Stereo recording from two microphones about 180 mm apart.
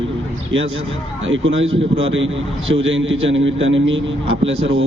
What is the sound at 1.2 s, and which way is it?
Speech, 90° right.